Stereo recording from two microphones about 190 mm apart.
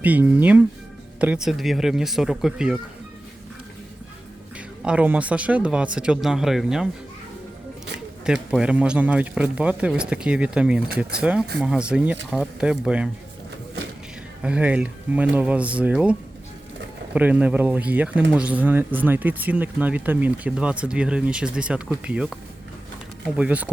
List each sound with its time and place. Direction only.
0.0 s a man's voice: 10° right (ahead or behind)
4.5 s a man's voice: 5° right (ahead or behind)
8.2 s a man's voice: 5° right (ahead or behind)
10.8 s speech: 55° right (ahead or behind)
11.2 s a man's voice: 5° right (ahead or behind)
14.4 s speech: 5° right (ahead or behind)
17.2 s speech: 10° right (ahead or behind)
23.4 s speech: 5° right (ahead or behind)